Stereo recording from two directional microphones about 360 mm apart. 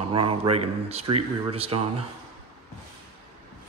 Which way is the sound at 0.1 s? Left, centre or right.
Centre.